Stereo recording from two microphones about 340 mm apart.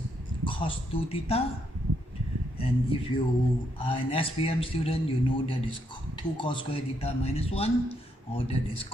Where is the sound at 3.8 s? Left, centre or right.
Centre.